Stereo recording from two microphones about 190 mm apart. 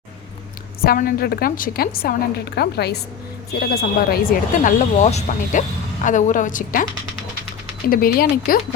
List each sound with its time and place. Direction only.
0.8 s speech: 50° left (ahead or behind)
7.9 s speech: 50° left (ahead or behind)